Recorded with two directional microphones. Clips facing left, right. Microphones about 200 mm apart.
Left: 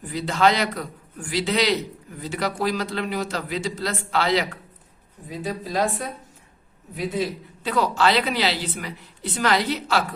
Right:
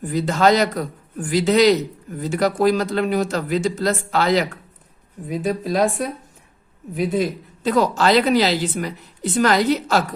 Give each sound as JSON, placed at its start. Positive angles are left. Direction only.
{"t": 0.0, "sound": "speech", "side_deg": -45}
{"t": 6.9, "sound": "speech", "side_deg": -45}